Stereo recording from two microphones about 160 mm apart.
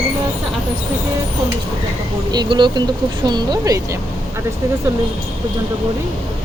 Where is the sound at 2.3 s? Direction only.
25° right (ahead or behind).